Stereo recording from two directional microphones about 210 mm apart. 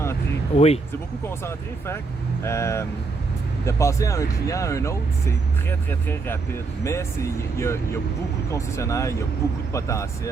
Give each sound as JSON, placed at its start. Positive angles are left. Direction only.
{"t": 0.5, "sound": "speech", "side_deg": 30}
{"t": 1.3, "sound": "speech", "side_deg": 10}